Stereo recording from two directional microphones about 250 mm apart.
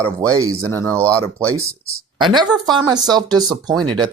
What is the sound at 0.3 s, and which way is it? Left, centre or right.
Speech, centre.